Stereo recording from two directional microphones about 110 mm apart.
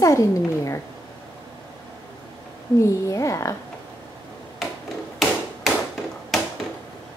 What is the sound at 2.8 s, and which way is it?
Speech, 30° left (ahead or behind).